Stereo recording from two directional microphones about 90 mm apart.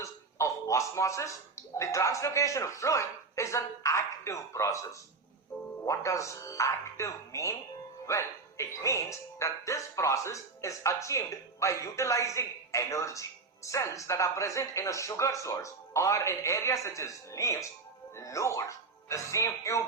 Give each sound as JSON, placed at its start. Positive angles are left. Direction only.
{"t": 0.0, "sound": "a man's voice", "side_deg": 35}